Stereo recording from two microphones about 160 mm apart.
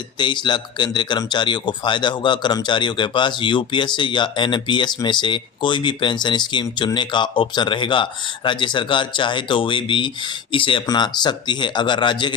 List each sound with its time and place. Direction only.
0.2 s speech: 30° left (ahead or behind)